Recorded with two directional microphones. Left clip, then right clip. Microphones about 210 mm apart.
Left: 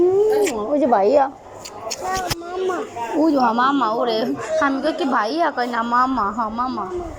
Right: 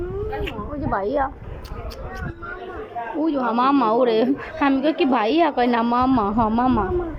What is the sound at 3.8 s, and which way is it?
A woman's voice, 15° right (ahead or behind).